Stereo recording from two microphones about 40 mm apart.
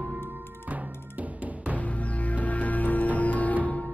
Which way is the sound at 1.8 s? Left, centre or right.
Left.